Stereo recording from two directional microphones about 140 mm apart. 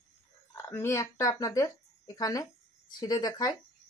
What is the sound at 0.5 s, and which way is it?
Speech, 15° left (ahead or behind).